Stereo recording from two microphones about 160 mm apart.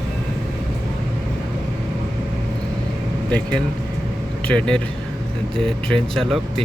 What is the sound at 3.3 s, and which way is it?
Air conditioning, 5° left (ahead or behind).